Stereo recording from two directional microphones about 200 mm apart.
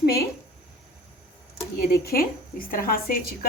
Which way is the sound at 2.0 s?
50° left (ahead or behind).